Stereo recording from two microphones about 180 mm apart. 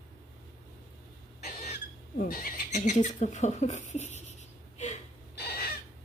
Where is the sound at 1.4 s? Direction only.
40° left (ahead or behind).